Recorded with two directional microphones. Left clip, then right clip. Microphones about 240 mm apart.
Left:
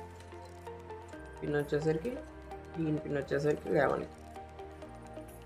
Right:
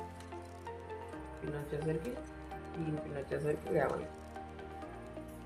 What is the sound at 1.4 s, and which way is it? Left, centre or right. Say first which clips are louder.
Music: left 8 dB; left.